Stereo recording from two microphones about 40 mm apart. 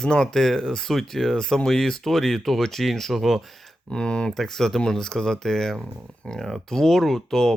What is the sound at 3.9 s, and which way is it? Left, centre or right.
Speech, left.